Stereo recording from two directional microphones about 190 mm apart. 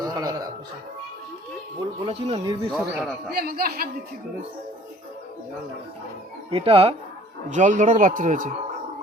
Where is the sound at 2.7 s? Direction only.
Centre (ahead or behind).